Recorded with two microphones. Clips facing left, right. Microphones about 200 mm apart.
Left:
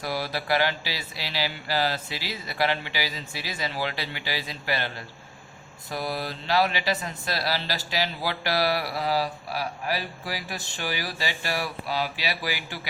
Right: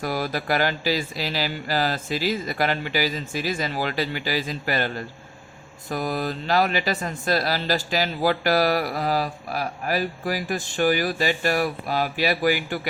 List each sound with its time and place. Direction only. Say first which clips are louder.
0.0 s speech: right 4 dB; 45° right (ahead or behind)